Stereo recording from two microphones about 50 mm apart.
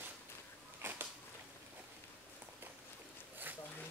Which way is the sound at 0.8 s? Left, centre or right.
Right.